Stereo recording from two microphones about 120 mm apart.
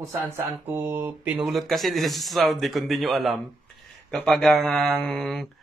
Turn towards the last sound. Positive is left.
turn(degrees=5)  # may be behind; listen again after turning